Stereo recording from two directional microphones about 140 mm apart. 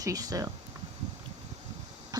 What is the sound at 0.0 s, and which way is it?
Speech, 25° right (ahead or behind).